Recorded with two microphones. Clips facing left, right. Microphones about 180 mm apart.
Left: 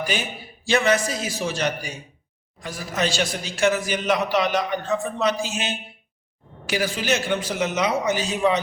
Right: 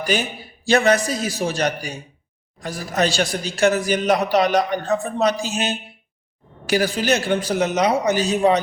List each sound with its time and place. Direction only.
0.7 s a man's voice: 40° right (ahead or behind)